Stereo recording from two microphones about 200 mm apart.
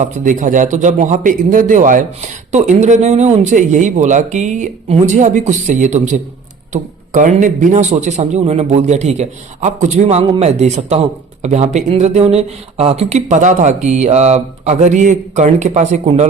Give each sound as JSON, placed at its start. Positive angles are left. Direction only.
{"t": 0.0, "sound": "a man's voice", "side_deg": -40}